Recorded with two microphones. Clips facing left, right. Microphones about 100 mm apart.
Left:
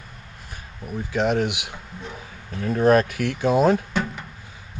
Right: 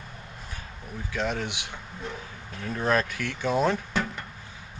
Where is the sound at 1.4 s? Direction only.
10° left (ahead or behind).